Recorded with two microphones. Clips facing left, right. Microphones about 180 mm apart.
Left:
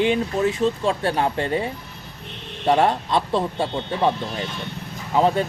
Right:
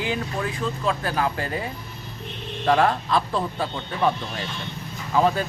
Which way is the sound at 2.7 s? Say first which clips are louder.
Left 2 dB; 25° left (ahead or behind).